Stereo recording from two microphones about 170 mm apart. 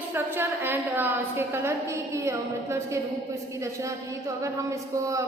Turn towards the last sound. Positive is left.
turn(degrees=-20)  # may be behind; listen again after turning